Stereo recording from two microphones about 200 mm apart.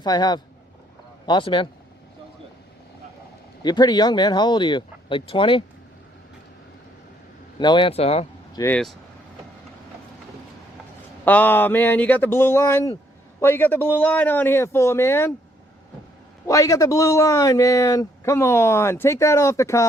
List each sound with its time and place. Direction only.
0.0 s speech: 20° left (ahead or behind)
3.6 s speech: 20° left (ahead or behind)
7.6 s speech: 25° left (ahead or behind)
8.5 s speech: 10° left (ahead or behind)
11.3 s a man's voice: 10° left (ahead or behind)
16.5 s a man's voice: 15° left (ahead or behind)